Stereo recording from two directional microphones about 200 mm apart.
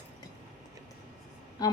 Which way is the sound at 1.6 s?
20° left (ahead or behind).